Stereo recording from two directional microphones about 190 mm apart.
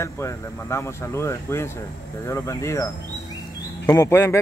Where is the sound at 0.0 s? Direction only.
15° left (ahead or behind).